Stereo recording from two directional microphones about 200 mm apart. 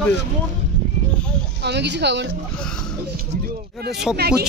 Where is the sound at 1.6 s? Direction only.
60° right (ahead or behind).